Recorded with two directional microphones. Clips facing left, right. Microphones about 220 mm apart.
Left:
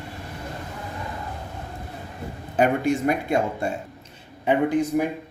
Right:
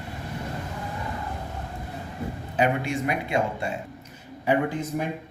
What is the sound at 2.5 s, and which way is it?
Speech, 45° left (ahead or behind).